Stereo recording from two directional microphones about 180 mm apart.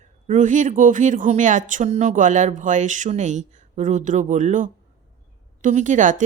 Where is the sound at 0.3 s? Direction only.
45° right (ahead or behind).